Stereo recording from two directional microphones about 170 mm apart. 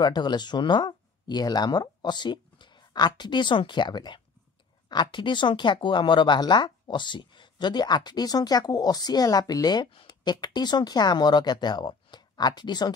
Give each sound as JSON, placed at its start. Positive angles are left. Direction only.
{"t": 0.0, "sound": "speech", "side_deg": 25}